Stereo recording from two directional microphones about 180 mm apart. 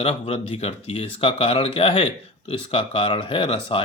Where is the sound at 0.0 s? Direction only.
30° left (ahead or behind).